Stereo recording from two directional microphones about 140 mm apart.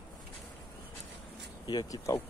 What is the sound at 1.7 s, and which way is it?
Speech, 25° left (ahead or behind).